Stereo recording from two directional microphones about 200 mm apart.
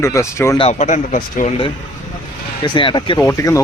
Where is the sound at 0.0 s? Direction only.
15° left (ahead or behind).